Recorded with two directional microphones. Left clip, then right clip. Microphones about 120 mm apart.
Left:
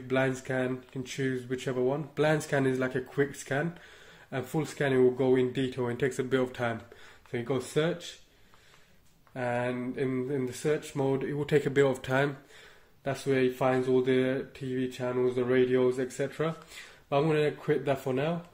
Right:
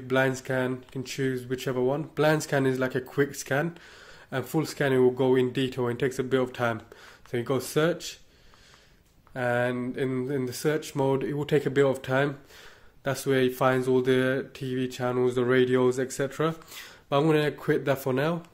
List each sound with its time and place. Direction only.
0.1 s speech: 45° right (ahead or behind)
7.2 s speech: 55° right (ahead or behind)
9.3 s speech: 50° right (ahead or behind)
11.3 s speech: 35° right (ahead or behind)
13.0 s speech: 65° right (ahead or behind)